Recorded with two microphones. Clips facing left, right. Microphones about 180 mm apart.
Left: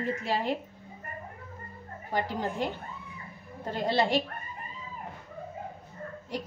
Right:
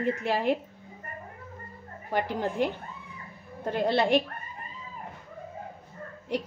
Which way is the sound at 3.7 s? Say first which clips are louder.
Right 3 dB; 60° right (ahead or behind).